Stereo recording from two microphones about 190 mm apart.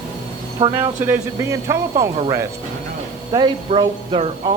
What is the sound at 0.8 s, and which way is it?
Speech, 10° right (ahead or behind).